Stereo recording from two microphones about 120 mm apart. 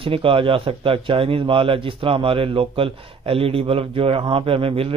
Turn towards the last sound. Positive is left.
turn(degrees=-50)  # may be behind; listen again after turning